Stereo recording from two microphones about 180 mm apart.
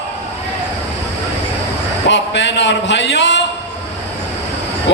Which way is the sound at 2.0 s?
75° left (ahead or behind).